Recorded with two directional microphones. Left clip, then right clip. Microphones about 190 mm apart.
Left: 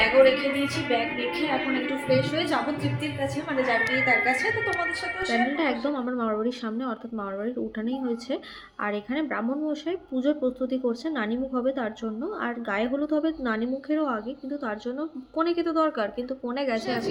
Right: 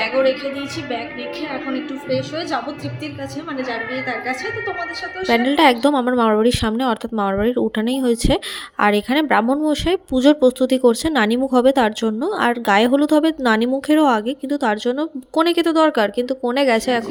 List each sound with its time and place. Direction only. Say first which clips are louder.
2.0 s a woman's voice: right 2 dB; 10° right (ahead or behind)
3.7 s a woman's voice: left 3 dB; 10° right (ahead or behind)
5.3 s speech: right 12 dB; 60° right (ahead or behind)